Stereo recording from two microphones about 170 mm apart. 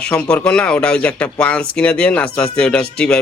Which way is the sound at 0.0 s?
5° left (ahead or behind).